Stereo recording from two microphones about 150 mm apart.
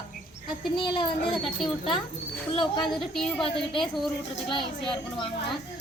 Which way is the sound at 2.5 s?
30° left (ahead or behind).